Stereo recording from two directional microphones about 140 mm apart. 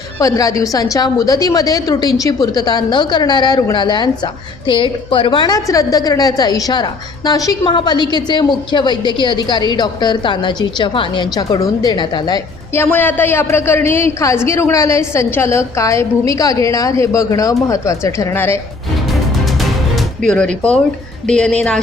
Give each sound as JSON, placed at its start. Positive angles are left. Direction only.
{"t": 0.2, "sound": "a woman's voice", "side_deg": 25}
{"t": 12.7, "sound": "a woman's voice", "side_deg": 15}
{"t": 20.2, "sound": "speech", "side_deg": 5}